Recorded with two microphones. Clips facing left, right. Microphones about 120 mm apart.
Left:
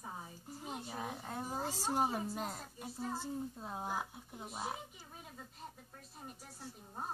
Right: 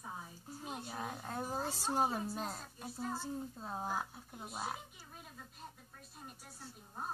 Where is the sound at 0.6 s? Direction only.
Centre (ahead or behind).